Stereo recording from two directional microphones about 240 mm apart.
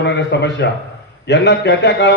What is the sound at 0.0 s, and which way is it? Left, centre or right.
A man's voice, left.